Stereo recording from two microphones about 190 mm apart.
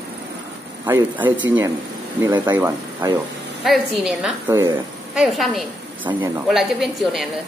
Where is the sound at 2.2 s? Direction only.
20° right (ahead or behind).